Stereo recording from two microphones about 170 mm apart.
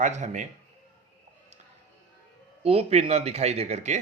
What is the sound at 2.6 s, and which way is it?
Speech, 35° right (ahead or behind).